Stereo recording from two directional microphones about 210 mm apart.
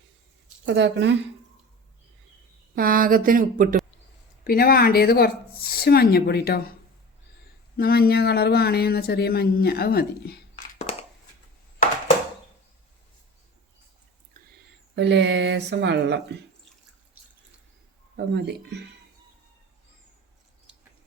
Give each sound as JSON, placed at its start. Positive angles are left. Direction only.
{"t": 0.6, "sound": "speech", "side_deg": -55}
{"t": 2.7, "sound": "a woman's voice", "side_deg": -40}
{"t": 4.4, "sound": "speech", "side_deg": 45}
{"t": 7.8, "sound": "speech", "side_deg": 45}
{"t": 14.9, "sound": "speech", "side_deg": -55}
{"t": 18.3, "sound": "speech", "side_deg": -55}